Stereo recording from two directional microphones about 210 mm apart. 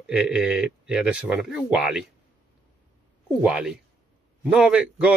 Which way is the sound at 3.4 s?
5° right (ahead or behind).